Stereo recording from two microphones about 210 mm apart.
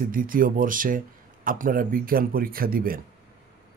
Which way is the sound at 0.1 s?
40° right (ahead or behind).